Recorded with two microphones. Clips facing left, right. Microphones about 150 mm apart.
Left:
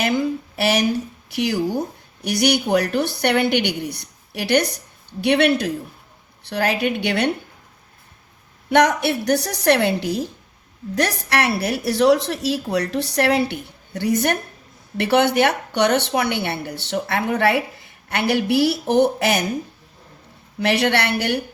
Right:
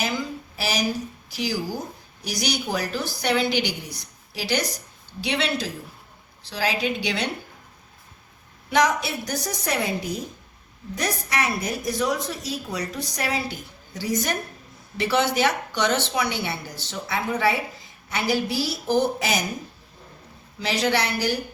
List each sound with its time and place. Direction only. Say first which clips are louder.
0.0 s a woman's voice: left 7 dB; 60° left (ahead or behind)
8.7 s a woman's voice: left 5 dB; 65° left (ahead or behind)
20.6 s a woman's voice: left 4 dB; 65° left (ahead or behind)